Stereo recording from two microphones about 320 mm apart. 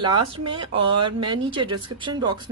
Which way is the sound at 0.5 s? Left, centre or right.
Centre.